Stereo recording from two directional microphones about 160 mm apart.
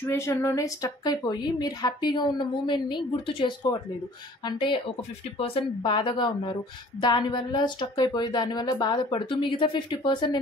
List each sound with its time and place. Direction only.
0.0 s a woman's voice: 15° left (ahead or behind)